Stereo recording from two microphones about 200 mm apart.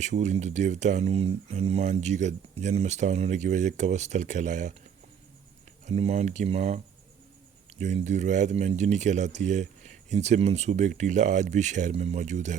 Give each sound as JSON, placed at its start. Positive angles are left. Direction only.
{"t": 0.0, "sound": "speech", "side_deg": -35}
{"t": 5.8, "sound": "speech", "side_deg": -35}